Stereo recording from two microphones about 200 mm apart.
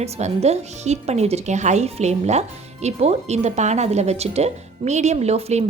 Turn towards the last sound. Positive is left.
turn(degrees=-30)  # may be behind; listen again after turning